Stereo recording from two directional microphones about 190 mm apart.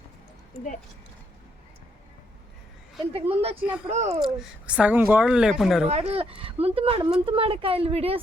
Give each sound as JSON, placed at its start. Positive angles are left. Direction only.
{"t": 3.1, "sound": "speech", "side_deg": -30}
{"t": 3.6, "sound": "speech", "side_deg": -5}
{"t": 3.8, "sound": "speech", "side_deg": -35}
{"t": 4.2, "sound": "a woman's voice", "side_deg": -5}
{"t": 5.9, "sound": "a woman's voice", "side_deg": -35}